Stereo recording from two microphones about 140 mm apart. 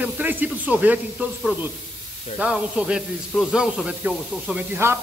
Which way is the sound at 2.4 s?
5° right (ahead or behind).